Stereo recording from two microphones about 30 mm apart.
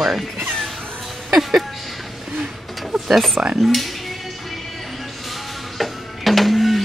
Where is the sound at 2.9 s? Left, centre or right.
Centre.